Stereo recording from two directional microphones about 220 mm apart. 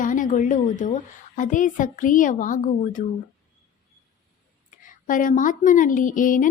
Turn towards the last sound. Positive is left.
turn(degrees=35)  # may be behind; listen again after turning